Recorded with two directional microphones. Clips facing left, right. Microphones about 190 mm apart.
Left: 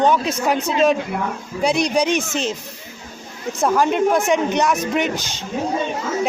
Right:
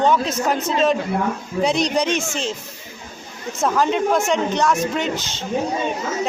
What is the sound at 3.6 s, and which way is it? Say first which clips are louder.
Speech: left 2 dB; 10° left (ahead or behind).